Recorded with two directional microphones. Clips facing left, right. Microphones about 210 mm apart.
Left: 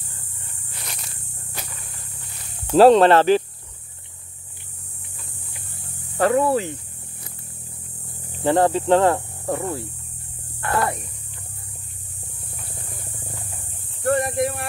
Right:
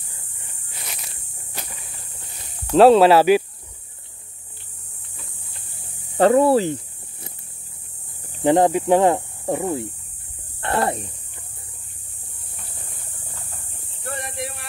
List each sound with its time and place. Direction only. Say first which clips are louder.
0.4 s a sound: right 1 dB; 5° right (ahead or behind)
2.7 s hum: right 1 dB; centre (ahead or behind)
6.1 s speech: right 4 dB; 30° right (ahead or behind)
8.5 s hum: right 1 dB; 15° right (ahead or behind)
10.6 s speech: right 1 dB; 30° right (ahead or behind)
14.0 s a sound: left 11 dB; 50° left (ahead or behind)